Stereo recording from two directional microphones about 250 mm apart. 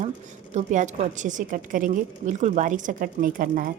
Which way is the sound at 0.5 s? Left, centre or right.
Right.